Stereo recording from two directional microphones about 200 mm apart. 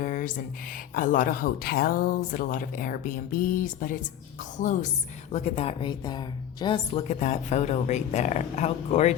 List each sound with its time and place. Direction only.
0.0 s a sound: 40° left (ahead or behind)
0.9 s a woman's voice: 40° left (ahead or behind); by 7.0 s 25° left (ahead or behind)
7.1 s speech: 35° left (ahead or behind)